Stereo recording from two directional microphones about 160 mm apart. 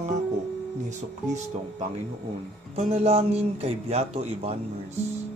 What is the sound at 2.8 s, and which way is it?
A man's voice, 40° right (ahead or behind).